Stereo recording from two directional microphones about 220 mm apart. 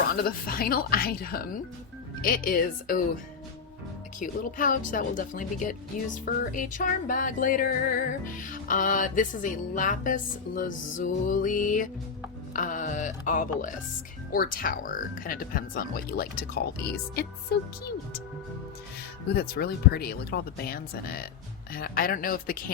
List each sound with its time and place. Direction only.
0.2 s music: 40° left (ahead or behind)
4.2 s music: 40° left (ahead or behind)
17.2 s speech: 45° left (ahead or behind)
19.3 s speech: 45° left (ahead or behind)
21.7 s music: 40° left (ahead or behind)